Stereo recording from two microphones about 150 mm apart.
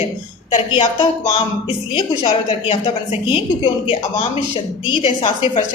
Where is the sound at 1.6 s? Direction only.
40° left (ahead or behind).